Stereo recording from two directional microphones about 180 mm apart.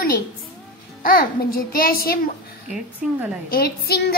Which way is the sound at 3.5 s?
60° left (ahead or behind).